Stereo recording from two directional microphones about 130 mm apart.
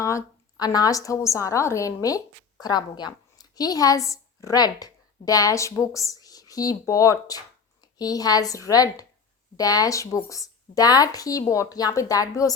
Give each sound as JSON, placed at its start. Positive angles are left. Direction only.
{"t": 0.0, "sound": "a woman's voice", "side_deg": 25}